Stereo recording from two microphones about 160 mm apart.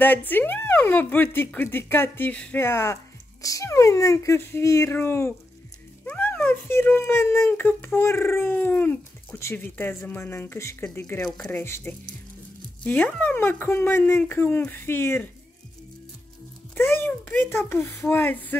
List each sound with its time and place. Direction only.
0.0 s a child's voice: 10° left (ahead or behind)
16.7 s a child's voice: 15° left (ahead or behind)